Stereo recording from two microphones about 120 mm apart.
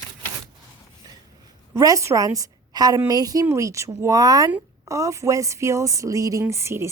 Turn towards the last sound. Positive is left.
turn(degrees=-20)  # may be behind; listen again after turning